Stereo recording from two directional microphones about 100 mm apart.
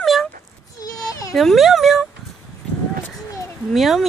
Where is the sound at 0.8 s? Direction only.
35° left (ahead or behind).